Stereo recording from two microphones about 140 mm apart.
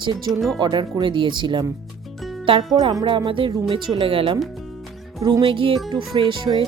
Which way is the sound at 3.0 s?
35° right (ahead or behind).